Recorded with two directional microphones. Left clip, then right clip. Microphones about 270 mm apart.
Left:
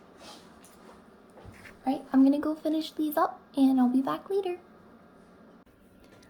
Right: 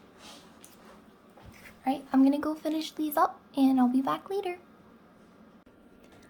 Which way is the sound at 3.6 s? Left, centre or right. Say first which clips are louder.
Even; centre.